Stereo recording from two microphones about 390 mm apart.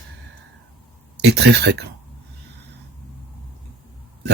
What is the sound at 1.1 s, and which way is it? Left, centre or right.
Speech, right.